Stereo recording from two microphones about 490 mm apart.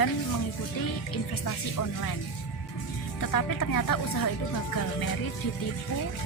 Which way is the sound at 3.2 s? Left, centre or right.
Left.